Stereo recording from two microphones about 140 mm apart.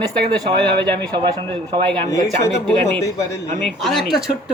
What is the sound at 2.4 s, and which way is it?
Speech, 15° left (ahead or behind).